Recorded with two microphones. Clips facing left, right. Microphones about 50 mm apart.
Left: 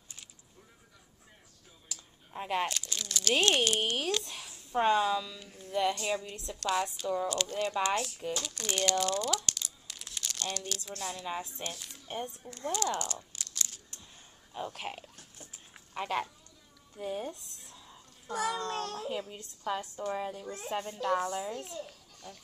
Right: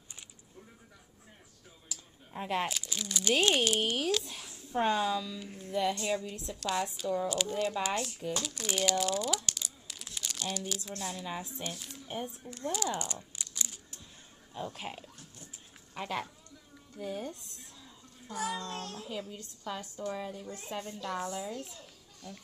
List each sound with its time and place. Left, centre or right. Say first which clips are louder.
2.3 s speech: left 1 dB; centre
4.2 s a sound: left 1 dB; centre
4.7 s speech: left 2 dB; centre
7.9 s speech: left 2 dB; centre
8.4 s speech: right 1 dB; centre
11.0 s speech: left 4 dB; centre
12.7 s a sound: left 3 dB; centre
14.8 s a woman's voice: left 1 dB; left
15.9 s speech: left 3 dB; centre
17.3 s a sound: left 1 dB; centre
18.3 s child singing: left 3 dB; left
19.0 s a woman's voice: left 3 dB; centre